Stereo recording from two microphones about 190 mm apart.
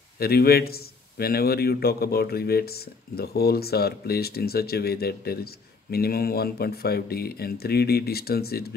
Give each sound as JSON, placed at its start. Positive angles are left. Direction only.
{"t": 0.2, "sound": "a man's voice", "side_deg": 55}